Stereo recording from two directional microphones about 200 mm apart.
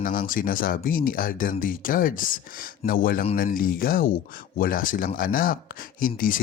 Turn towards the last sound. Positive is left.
turn(degrees=45)  # may be behind; listen again after turning